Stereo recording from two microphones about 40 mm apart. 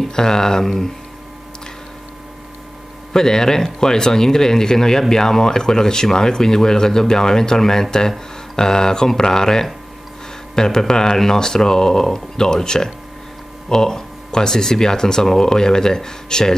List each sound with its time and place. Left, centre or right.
0.1 s speech: centre
3.1 s speech: centre